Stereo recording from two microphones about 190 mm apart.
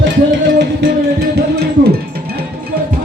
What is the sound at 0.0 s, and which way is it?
Music, 70° right (ahead or behind).